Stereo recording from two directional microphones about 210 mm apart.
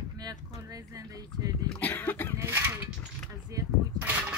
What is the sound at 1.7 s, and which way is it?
Speech, 10° left (ahead or behind).